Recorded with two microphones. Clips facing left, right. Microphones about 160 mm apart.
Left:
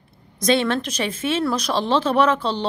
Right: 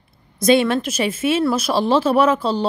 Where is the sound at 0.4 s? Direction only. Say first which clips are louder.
Right 4 dB; 10° right (ahead or behind).